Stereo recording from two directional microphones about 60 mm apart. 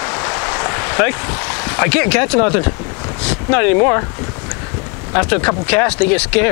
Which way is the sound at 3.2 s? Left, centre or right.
Centre.